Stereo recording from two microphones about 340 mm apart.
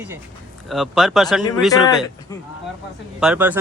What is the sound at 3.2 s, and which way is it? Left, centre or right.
Speech, centre.